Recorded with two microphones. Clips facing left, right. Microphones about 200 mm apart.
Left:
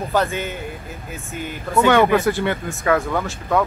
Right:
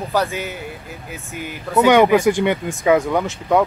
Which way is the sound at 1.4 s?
15° right (ahead or behind).